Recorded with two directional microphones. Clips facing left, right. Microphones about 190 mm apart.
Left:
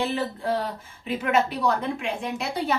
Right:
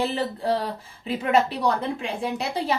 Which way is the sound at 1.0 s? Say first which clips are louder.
Right 2 dB; 35° right (ahead or behind).